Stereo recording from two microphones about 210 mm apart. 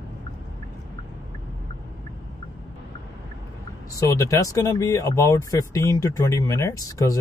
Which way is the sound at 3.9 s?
15° left (ahead or behind).